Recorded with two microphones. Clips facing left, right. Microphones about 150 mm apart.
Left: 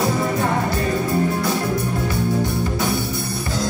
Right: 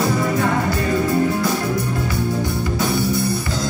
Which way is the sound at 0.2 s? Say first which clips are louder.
Right 1 dB; 20° left (ahead or behind).